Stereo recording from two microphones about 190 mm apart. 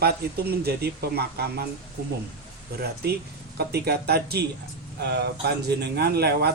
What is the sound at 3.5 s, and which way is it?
Speech, 55° right (ahead or behind).